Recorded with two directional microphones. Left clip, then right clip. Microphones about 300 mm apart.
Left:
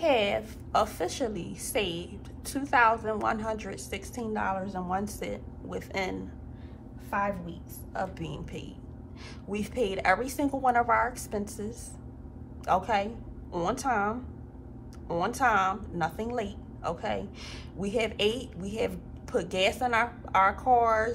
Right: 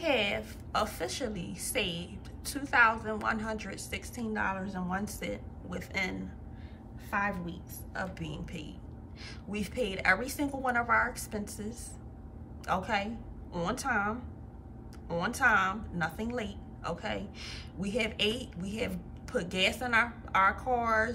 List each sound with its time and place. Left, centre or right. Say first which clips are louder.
0.0 s a woman's voice: left 4 dB; centre